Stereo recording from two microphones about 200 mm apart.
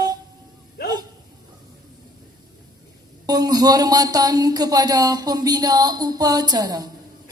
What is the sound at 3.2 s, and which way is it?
Speech, 20° right (ahead or behind).